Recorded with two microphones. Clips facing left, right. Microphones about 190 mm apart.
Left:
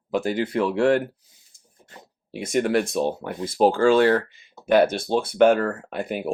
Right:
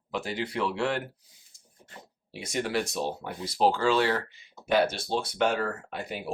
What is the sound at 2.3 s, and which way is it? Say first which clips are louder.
Speech: left 8 dB; 55° left (ahead or behind).